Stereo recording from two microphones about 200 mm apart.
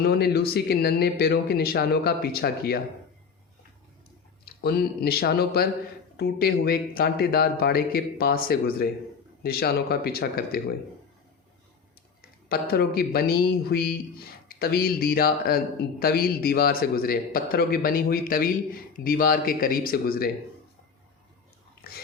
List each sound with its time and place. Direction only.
0.0 s speech: 50° left (ahead or behind)
4.4 s speech: 50° left (ahead or behind)
12.5 s speech: 50° left (ahead or behind)